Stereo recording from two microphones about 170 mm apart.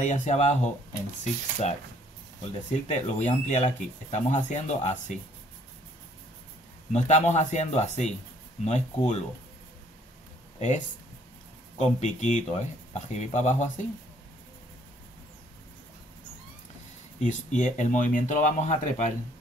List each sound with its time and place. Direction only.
0.0 s speech: 45° left (ahead or behind)
6.9 s speech: 40° left (ahead or behind)
11.8 s speech: 45° left (ahead or behind)
17.2 s speech: 45° left (ahead or behind)